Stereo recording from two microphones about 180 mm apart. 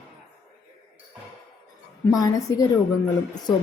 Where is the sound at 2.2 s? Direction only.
20° left (ahead or behind).